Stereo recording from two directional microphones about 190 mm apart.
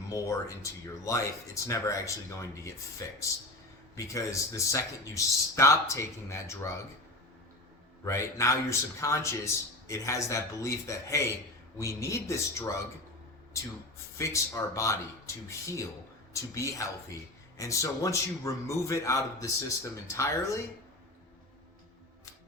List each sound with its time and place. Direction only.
0.1 s a man's voice: 15° left (ahead or behind)
8.0 s a man's voice: 15° left (ahead or behind)
14.2 s a man's voice: 15° left (ahead or behind)